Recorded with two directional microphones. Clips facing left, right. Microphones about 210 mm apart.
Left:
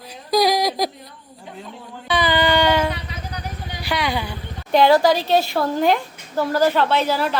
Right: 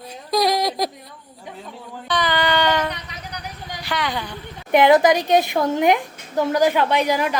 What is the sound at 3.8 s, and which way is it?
Speech, 10° left (ahead or behind).